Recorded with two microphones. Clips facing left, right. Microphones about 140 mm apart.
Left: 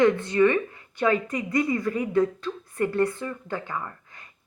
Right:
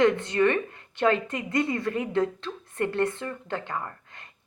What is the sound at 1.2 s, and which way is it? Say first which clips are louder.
Speech: left 2 dB; 25° right (ahead or behind).